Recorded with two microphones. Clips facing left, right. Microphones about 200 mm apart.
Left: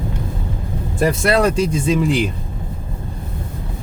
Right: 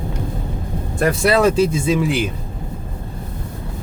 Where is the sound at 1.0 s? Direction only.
Centre (ahead or behind).